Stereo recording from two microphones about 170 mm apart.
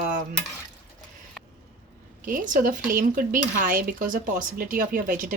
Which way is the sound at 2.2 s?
50° right (ahead or behind).